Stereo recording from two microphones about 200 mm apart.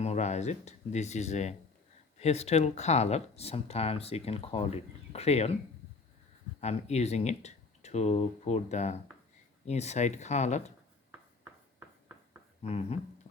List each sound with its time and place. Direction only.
0.0 s speech: 35° left (ahead or behind)
6.6 s speech: 35° left (ahead or behind)
12.6 s speech: 30° left (ahead or behind)